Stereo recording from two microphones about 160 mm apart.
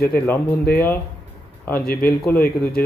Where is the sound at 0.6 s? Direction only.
75° left (ahead or behind).